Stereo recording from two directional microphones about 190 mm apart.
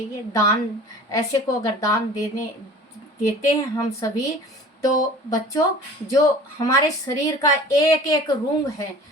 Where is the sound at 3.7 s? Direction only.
15° left (ahead or behind).